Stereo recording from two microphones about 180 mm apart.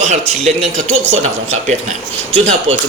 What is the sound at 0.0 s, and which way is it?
A man's voice, 40° right (ahead or behind).